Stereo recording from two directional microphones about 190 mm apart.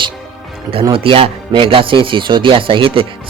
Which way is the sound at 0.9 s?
30° right (ahead or behind).